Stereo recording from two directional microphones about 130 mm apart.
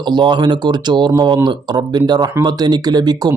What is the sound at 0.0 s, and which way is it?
Speech, 35° right (ahead or behind).